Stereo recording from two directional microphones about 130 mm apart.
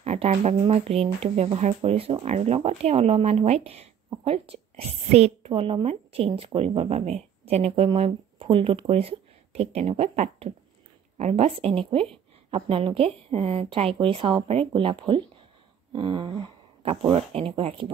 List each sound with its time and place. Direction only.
0.0 s a woman's voice: 55° right (ahead or behind)
5.5 s speech: 40° right (ahead or behind)